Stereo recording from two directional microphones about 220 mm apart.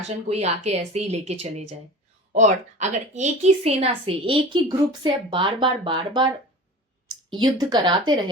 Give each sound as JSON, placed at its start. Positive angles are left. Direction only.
{"t": 0.3, "sound": "a woman's voice", "side_deg": -30}
{"t": 7.3, "sound": "a woman's voice", "side_deg": -20}